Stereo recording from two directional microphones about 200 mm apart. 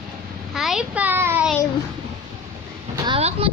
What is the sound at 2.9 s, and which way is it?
Speech, 25° right (ahead or behind).